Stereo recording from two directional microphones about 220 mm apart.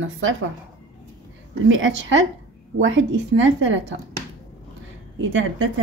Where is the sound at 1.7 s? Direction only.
60° right (ahead or behind).